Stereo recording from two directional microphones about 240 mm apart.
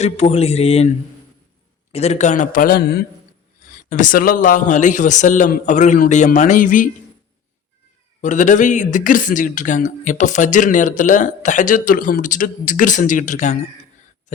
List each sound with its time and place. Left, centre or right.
0.0 s mantra: left
1.9 s speech: left
8.2 s speech: left